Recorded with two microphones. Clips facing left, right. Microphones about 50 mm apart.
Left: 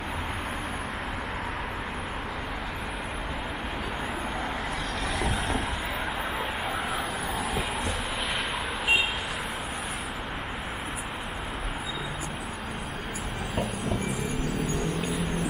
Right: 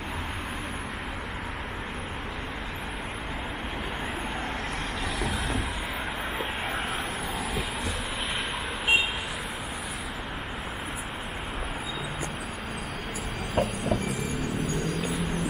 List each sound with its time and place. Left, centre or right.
13.6 s vehicle: right